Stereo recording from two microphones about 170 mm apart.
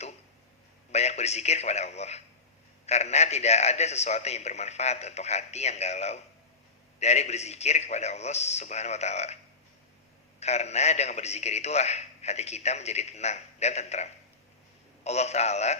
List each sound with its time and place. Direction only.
0.9 s a man's voice: 40° left (ahead or behind)
10.4 s a man's voice: 40° left (ahead or behind)